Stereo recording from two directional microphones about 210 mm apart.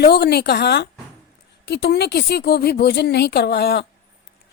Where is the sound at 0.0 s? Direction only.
50° left (ahead or behind).